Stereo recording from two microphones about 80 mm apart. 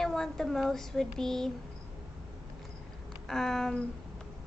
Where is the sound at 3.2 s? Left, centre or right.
Centre.